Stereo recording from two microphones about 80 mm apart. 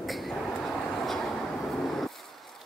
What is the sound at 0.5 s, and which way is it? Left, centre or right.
Vehicle, centre.